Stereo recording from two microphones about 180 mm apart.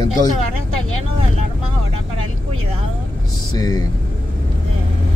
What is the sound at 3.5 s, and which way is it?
Speech, 20° left (ahead or behind).